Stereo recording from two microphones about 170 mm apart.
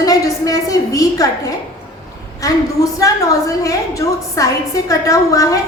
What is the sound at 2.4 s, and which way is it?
A woman's voice, 20° left (ahead or behind).